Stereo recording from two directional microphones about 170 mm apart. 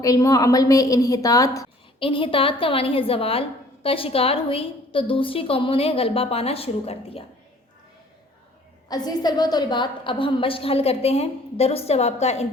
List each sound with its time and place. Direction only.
0.0 s a woman's voice: 20° left (ahead or behind)
2.0 s a woman's voice: 30° left (ahead or behind)
8.9 s a woman's voice: 25° left (ahead or behind); by 12.5 s 40° left (ahead or behind)